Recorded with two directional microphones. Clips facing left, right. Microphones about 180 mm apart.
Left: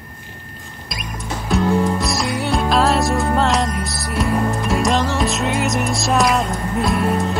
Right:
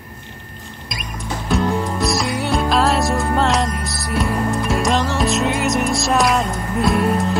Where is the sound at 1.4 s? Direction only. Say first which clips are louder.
Left 2 dB; centre (ahead or behind).